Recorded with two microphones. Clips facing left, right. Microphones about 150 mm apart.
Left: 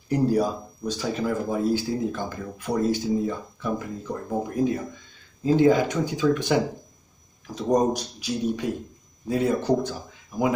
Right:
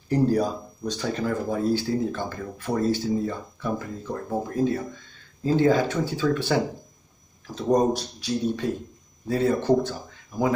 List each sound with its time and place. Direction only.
0.1 s speech: 10° left (ahead or behind)
7.7 s speech: 10° left (ahead or behind)